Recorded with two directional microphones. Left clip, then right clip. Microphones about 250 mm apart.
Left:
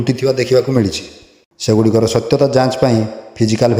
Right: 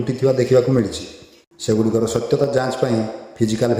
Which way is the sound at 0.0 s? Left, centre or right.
Left.